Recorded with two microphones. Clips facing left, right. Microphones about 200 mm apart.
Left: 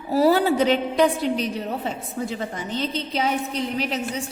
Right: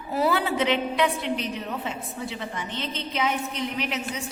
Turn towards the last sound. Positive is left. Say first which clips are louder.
# left 4 dB
turn(degrees=35)  # may be behind; listen again after turning